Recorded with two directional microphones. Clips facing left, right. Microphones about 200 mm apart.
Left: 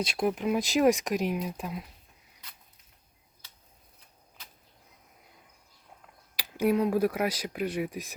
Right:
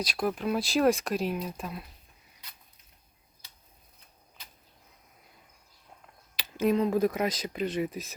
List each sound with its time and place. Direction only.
0.0 s speech: 25° left (ahead or behind)
6.3 s speech: 10° left (ahead or behind)